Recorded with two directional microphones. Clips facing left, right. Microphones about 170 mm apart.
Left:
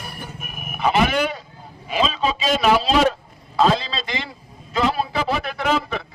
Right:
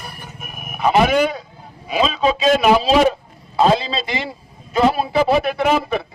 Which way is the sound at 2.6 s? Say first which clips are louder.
Right 1 dB; 10° right (ahead or behind).